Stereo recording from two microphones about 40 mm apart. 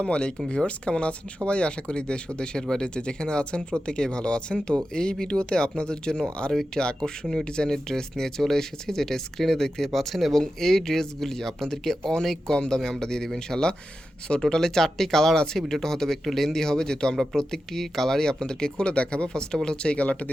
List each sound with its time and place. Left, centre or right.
0.0 s speech: left
20.0 s speech: left